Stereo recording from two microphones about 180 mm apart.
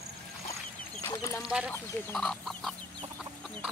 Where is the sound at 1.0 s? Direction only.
15° left (ahead or behind).